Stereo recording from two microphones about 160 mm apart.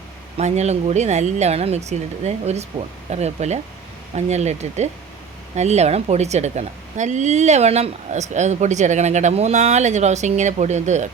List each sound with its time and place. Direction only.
0.3 s a woman's voice: 45° right (ahead or behind)